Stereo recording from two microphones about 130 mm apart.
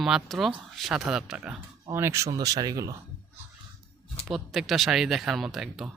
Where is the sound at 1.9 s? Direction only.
20° right (ahead or behind).